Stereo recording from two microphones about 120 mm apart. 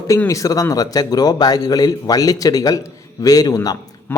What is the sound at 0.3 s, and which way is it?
A man's voice, 30° left (ahead or behind).